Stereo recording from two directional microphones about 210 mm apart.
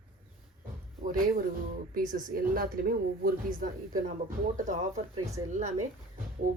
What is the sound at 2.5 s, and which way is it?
Speech, 45° right (ahead or behind).